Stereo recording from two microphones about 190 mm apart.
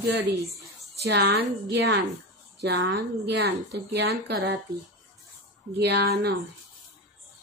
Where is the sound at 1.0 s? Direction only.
60° right (ahead or behind).